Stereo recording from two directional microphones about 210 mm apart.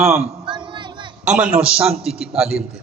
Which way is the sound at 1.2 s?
5° right (ahead or behind).